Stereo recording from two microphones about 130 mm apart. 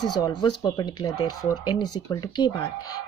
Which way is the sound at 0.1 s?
35° left (ahead or behind).